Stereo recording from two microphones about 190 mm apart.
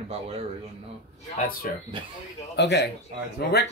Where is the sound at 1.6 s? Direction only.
45° left (ahead or behind).